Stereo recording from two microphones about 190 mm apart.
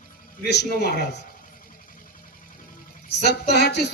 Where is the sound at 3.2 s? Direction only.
60° left (ahead or behind).